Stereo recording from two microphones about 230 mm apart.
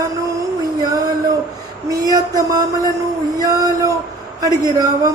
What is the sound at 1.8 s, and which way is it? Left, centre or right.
Speech, centre.